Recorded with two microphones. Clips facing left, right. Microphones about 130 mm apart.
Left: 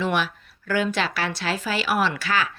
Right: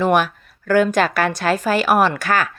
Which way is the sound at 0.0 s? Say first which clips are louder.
Right 8 dB; 45° right (ahead or behind).